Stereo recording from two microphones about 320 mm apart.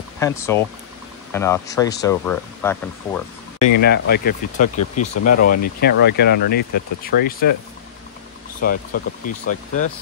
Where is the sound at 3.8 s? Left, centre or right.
Left.